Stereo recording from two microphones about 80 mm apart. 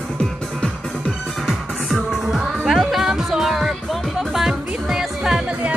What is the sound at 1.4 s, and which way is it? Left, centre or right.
Music, centre.